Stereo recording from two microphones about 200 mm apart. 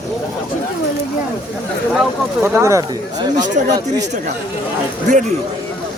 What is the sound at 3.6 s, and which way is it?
Speech, 40° right (ahead or behind).